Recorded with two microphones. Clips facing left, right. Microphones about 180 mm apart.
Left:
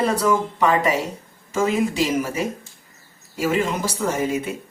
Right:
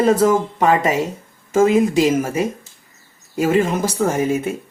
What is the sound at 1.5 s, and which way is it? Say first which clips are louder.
Speech: right 7 dB; 45° right (ahead or behind).